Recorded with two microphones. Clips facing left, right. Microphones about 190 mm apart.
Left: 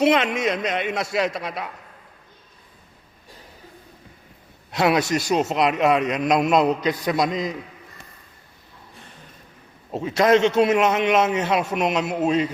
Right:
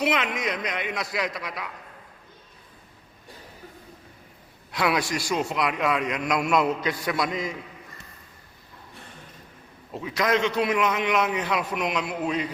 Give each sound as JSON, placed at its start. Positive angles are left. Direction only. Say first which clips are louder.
{"t": 0.0, "sound": "a man's voice", "louder": "left 7 dB", "side_deg": 30}
{"t": 4.7, "sound": "a man's voice", "louder": "left 5 dB", "side_deg": 25}
{"t": 9.9, "sound": "a man's voice", "louder": "left 7 dB", "side_deg": 25}